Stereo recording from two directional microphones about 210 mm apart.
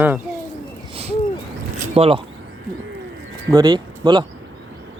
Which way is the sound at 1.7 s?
30° right (ahead or behind).